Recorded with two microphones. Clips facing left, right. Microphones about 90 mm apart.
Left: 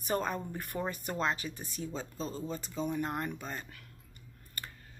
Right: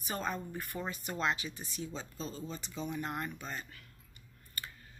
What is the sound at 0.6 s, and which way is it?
Speech, 55° left (ahead or behind).